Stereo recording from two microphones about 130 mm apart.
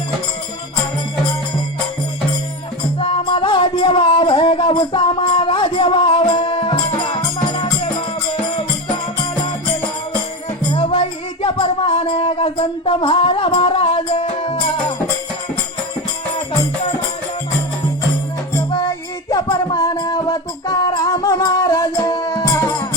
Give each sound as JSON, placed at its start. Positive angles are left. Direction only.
{"t": 3.0, "sound": "music", "side_deg": 45}
{"t": 10.8, "sound": "music", "side_deg": 50}
{"t": 19.5, "sound": "music", "side_deg": 35}
{"t": 21.0, "sound": "music", "side_deg": 25}